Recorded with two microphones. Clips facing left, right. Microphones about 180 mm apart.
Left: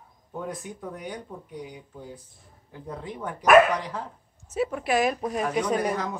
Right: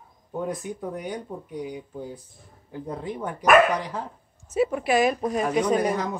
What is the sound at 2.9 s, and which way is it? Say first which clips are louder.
Speech: right 4 dB; 20° right (ahead or behind).